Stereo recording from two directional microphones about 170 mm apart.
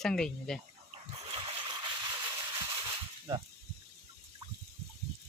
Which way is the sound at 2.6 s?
20° right (ahead or behind).